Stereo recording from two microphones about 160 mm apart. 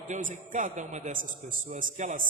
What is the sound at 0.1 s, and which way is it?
A man's voice, 55° right (ahead or behind).